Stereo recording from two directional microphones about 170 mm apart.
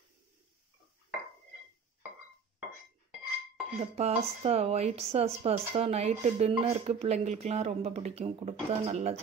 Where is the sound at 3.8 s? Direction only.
40° right (ahead or behind).